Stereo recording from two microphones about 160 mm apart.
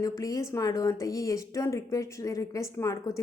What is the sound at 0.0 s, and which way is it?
A woman's voice, 20° left (ahead or behind).